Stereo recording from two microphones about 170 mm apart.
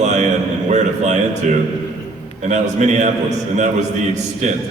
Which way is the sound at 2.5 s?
45° right (ahead or behind).